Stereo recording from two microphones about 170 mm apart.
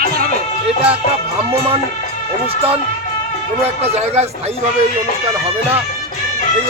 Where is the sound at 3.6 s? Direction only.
35° right (ahead or behind).